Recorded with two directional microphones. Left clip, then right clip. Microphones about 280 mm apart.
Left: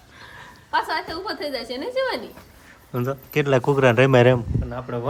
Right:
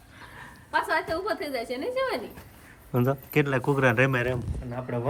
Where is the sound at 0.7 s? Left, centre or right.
Centre.